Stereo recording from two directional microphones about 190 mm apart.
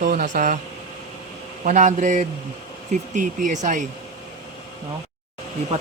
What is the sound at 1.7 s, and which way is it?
Speech, 40° right (ahead or behind).